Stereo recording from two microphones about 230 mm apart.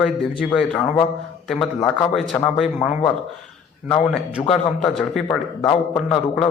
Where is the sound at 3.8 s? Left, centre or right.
Centre.